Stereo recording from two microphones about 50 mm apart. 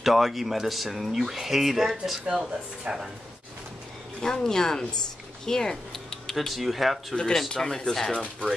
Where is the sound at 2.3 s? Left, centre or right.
Centre.